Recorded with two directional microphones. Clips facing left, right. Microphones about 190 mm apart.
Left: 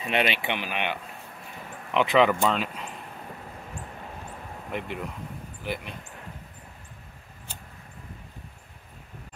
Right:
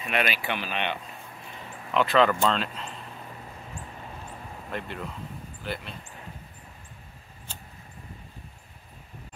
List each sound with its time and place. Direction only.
0.0 s speech: 25° left (ahead or behind)
2.0 s speech: 15° left (ahead or behind)
4.6 s speech: 15° left (ahead or behind)